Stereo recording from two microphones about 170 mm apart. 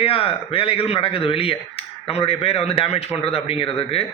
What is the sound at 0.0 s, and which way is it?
A man's voice, 35° left (ahead or behind).